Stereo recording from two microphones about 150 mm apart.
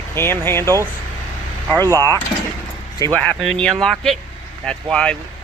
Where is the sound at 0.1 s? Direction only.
15° left (ahead or behind).